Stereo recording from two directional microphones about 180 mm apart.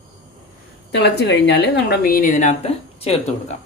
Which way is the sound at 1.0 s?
70° left (ahead or behind).